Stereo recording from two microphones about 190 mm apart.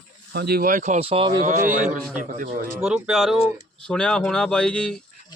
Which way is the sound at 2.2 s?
45° right (ahead or behind).